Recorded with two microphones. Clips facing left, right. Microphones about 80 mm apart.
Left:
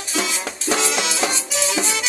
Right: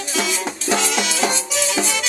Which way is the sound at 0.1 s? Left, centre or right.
Left.